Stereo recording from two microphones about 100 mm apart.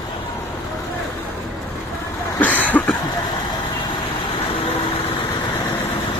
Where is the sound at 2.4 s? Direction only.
15° left (ahead or behind).